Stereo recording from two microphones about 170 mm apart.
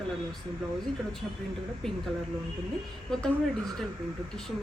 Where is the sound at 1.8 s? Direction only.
5° left (ahead or behind).